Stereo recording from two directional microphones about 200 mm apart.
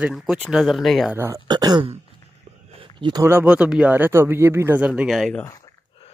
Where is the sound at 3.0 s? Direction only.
20° right (ahead or behind); by 5.4 s centre (ahead or behind).